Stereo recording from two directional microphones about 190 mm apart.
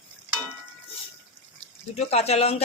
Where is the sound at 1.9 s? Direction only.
35° left (ahead or behind).